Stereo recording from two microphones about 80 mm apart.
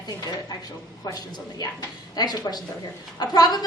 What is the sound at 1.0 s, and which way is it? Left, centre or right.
A woman's voice, left.